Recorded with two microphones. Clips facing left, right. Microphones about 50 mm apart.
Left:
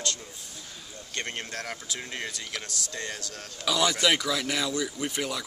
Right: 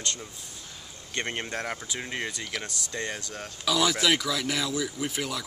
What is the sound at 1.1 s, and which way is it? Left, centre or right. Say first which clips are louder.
Speech: right 3 dB; right.